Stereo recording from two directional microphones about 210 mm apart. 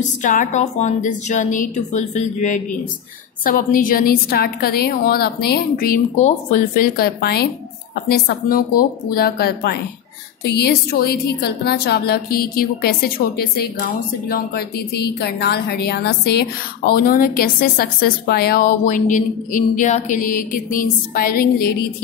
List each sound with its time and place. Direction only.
0.2 s a woman's voice: 35° left (ahead or behind)